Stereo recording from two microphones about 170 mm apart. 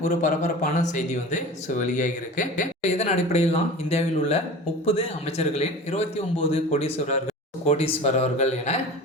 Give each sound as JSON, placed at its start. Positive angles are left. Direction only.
{"t": 0.0, "sound": "a man's voice", "side_deg": 45}